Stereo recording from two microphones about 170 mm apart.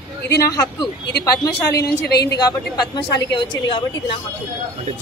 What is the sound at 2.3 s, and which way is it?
A woman's voice, 25° left (ahead or behind).